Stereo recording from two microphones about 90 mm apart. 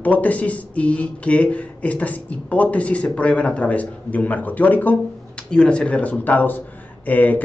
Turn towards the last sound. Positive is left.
turn(degrees=20)  # may be behind; listen again after turning